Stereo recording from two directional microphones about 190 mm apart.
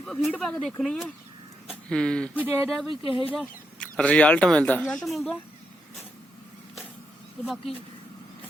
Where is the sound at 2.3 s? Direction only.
10° right (ahead or behind).